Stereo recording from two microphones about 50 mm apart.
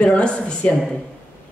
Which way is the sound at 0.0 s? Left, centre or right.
Centre.